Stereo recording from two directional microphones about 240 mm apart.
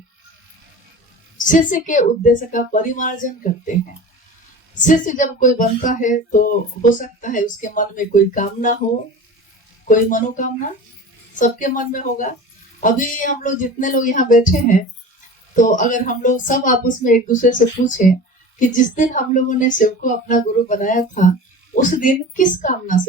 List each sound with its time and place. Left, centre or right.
1.5 s speech: left
4.7 s speech: left
9.8 s speech: left